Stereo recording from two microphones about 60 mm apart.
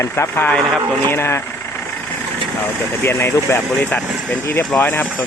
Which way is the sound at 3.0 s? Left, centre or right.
Left.